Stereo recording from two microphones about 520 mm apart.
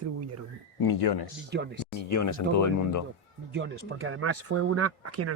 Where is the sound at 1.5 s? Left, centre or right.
Centre.